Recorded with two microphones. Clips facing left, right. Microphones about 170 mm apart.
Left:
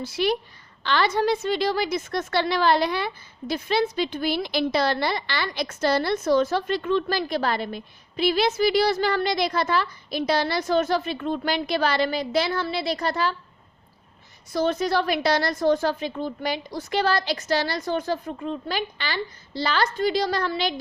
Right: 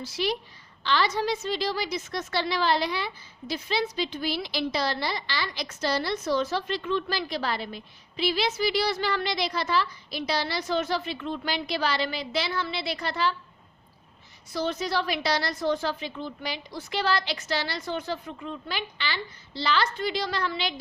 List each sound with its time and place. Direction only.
0.0 s a woman's voice: 55° left (ahead or behind)
14.5 s a woman's voice: 50° left (ahead or behind)